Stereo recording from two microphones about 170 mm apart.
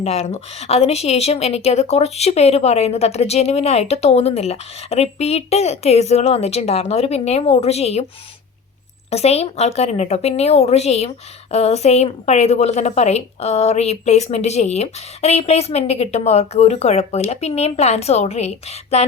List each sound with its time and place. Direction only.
0.0 s speech: 40° left (ahead or behind)
9.0 s speech: 40° left (ahead or behind)